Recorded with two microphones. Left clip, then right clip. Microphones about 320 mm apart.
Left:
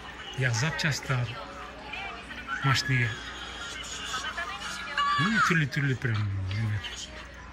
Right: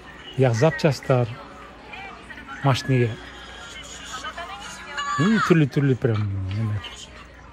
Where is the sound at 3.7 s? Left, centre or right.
Centre.